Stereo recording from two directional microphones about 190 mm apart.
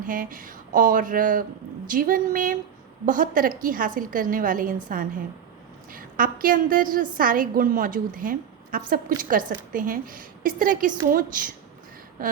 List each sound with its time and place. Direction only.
0.0 s a woman's voice: 45° right (ahead or behind)